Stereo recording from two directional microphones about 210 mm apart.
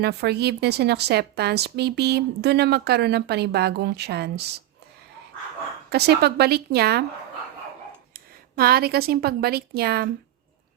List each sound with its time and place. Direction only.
0.0 s a woman's voice: 50° right (ahead or behind)
5.9 s a woman's voice: 50° right (ahead or behind)
8.1 s speech: 45° right (ahead or behind)